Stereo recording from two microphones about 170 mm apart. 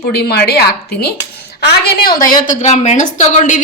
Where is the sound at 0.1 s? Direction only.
70° left (ahead or behind).